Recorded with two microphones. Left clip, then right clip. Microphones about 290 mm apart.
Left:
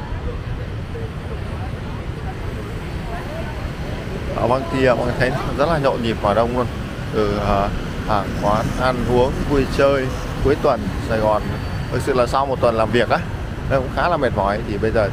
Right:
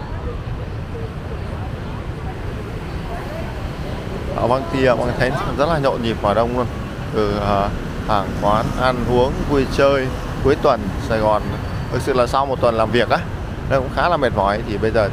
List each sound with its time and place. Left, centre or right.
4.4 s speech: centre